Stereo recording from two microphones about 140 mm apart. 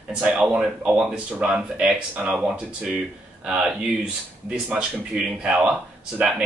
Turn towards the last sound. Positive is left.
turn(degrees=-5)  # may be behind; listen again after turning